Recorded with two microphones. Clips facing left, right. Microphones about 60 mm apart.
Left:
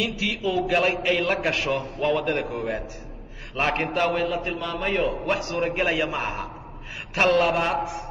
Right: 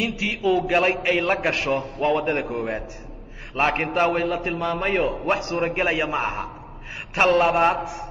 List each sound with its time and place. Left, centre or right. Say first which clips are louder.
0.0 s a man's voice: right 2 dB; right
5.6 s a man's voice: right 1 dB; right